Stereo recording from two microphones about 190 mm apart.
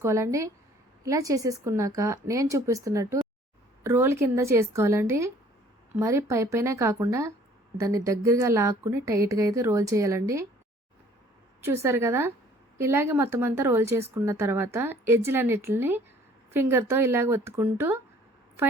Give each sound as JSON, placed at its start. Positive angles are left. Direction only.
{"t": 0.0, "sound": "speech", "side_deg": -15}
{"t": 11.6, "sound": "speech", "side_deg": -15}